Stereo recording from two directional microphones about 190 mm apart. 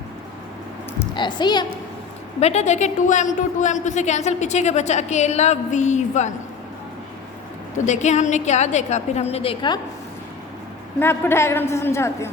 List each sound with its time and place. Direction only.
1.1 s a child's voice: 25° left (ahead or behind)
2.4 s a woman's voice: 35° left (ahead or behind)
7.9 s a woman's voice: 40° left (ahead or behind)
11.0 s a woman's voice: 10° left (ahead or behind)